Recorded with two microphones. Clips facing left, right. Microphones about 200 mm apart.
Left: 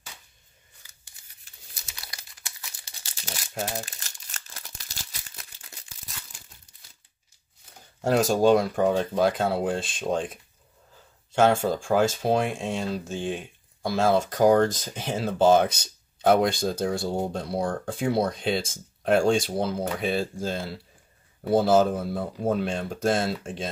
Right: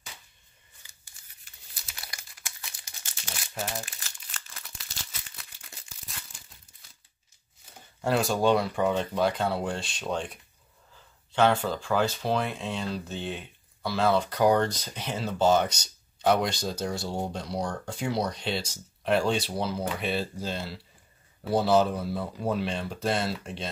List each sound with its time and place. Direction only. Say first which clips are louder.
2.8 s crumpling: left 2 dB; 35° left (ahead or behind)
8.1 s speech: left 4 dB; 40° left (ahead or behind)
10.1 s speech: left 4 dB; centre (ahead or behind)
11.3 s speech: left 3 dB; 45° left (ahead or behind)